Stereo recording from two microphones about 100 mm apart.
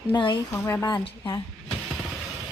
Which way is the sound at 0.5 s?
25° left (ahead or behind).